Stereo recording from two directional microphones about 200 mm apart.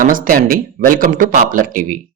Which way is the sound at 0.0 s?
45° right (ahead or behind).